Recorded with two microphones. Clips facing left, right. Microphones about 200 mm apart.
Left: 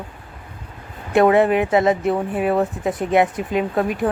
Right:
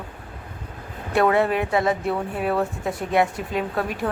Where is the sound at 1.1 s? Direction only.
20° left (ahead or behind).